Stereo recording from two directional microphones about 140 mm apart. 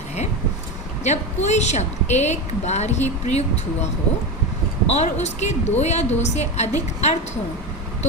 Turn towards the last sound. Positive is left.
turn(degrees=50)  # may be behind; listen again after turning